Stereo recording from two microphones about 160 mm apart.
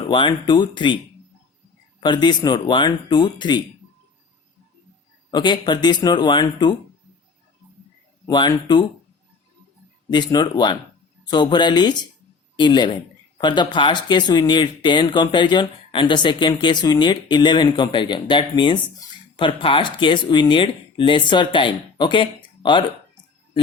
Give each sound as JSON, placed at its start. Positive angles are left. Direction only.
{"t": 0.1, "sound": "speech", "side_deg": 30}
{"t": 2.0, "sound": "speech", "side_deg": 30}
{"t": 5.3, "sound": "speech", "side_deg": 30}
{"t": 8.3, "sound": "speech", "side_deg": 30}
{"t": 10.1, "sound": "speech", "side_deg": 30}